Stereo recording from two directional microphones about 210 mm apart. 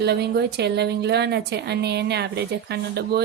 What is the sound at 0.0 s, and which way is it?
A woman's voice, 50° right (ahead or behind).